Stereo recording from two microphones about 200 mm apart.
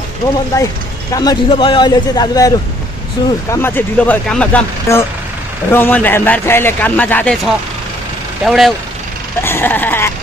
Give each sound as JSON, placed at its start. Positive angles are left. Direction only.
{"t": 0.5, "sound": "a man's voice", "side_deg": 15}
{"t": 8.5, "sound": "speech", "side_deg": 0}
{"t": 9.4, "sound": "speech", "side_deg": 10}